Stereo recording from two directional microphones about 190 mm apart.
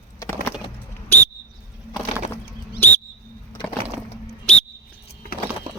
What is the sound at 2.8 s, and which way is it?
Bird, 10° left (ahead or behind).